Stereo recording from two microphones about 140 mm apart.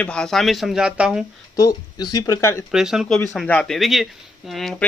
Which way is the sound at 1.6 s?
25° left (ahead or behind).